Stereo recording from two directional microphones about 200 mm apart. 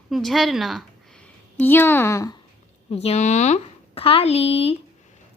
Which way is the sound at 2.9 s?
30° left (ahead or behind).